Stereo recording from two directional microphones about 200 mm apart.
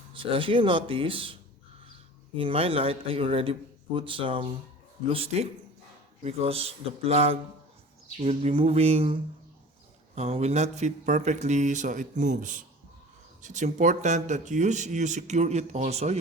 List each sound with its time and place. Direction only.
0.1 s a man's voice: 25° right (ahead or behind)
10.2 s speech: 30° right (ahead or behind)